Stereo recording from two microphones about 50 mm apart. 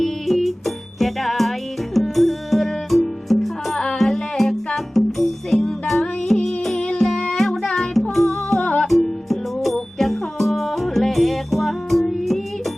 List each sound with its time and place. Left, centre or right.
0.0 s music: centre
8.6 s music: centre
8.9 s music: centre